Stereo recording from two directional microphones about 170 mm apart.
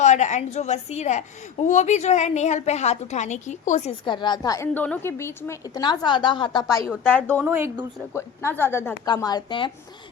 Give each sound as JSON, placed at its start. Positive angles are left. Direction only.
{"t": 0.0, "sound": "a woman's voice", "side_deg": 45}
{"t": 4.0, "sound": "a woman's voice", "side_deg": 25}
{"t": 7.2, "sound": "speech", "side_deg": -15}
{"t": 8.1, "sound": "a woman's voice", "side_deg": 15}
{"t": 9.0, "sound": "a woman's voice", "side_deg": 25}